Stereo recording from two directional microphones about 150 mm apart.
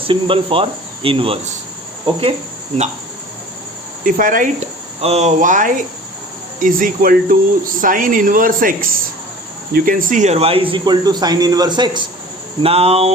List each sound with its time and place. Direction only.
0.1 s speech: 35° right (ahead or behind)
4.0 s speech: 65° right (ahead or behind); by 12.0 s 30° right (ahead or behind)
12.6 s speech: 40° right (ahead or behind)